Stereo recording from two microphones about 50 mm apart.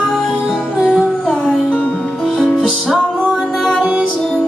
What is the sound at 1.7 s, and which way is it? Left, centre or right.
Music, centre.